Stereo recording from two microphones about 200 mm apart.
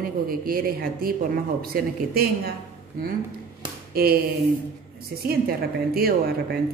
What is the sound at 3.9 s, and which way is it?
Speech, 50° right (ahead or behind).